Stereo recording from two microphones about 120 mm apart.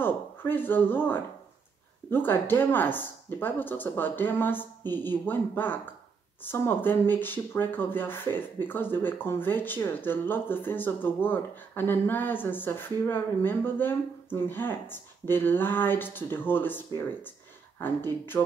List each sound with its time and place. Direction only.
0.0 s speech: 15° left (ahead or behind)